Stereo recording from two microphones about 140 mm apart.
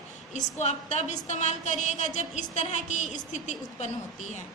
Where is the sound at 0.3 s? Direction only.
55° left (ahead or behind).